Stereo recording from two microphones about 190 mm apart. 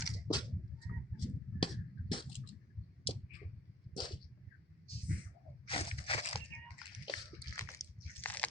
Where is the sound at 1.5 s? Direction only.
25° left (ahead or behind).